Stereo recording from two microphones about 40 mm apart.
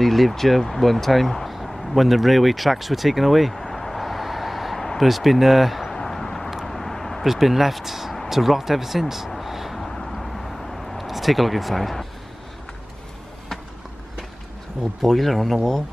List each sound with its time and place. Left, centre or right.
0.0 s speech: centre
5.9 s a sound: centre
6.6 s vehicle: centre
7.2 s speech: centre
8.3 s a sound: centre
14.8 s speech: centre